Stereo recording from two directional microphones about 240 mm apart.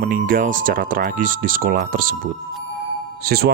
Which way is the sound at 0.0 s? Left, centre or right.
Right.